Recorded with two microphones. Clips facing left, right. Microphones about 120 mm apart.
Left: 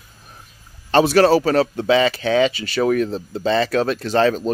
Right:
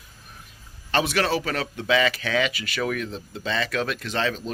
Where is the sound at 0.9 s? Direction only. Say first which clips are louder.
Left 10 dB; 35° left (ahead or behind).